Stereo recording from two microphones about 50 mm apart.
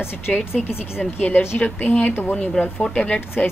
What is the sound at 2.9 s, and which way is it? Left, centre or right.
Speech, left.